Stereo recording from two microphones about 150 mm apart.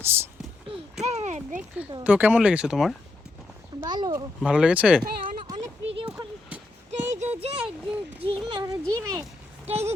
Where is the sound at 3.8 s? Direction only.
25° right (ahead or behind).